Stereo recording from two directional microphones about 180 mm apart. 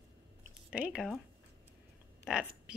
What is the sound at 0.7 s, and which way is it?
Speech, 5° right (ahead or behind).